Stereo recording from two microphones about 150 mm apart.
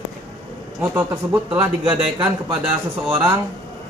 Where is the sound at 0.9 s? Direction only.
15° right (ahead or behind).